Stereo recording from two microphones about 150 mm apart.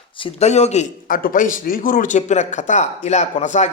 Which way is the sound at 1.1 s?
70° left (ahead or behind).